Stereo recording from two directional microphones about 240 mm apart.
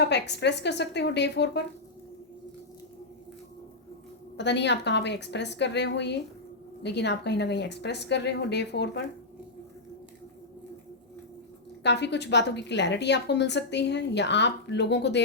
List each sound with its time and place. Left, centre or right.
0.0 s a woman's voice: left
4.4 s a woman's voice: left
11.8 s a woman's voice: left